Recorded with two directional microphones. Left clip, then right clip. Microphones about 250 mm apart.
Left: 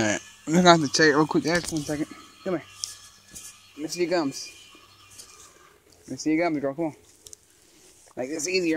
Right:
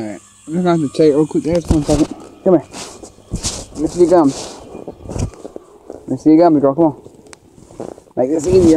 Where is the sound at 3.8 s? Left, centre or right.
Left.